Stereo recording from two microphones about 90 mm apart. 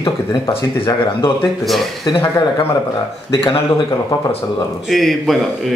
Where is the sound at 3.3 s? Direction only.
85° left.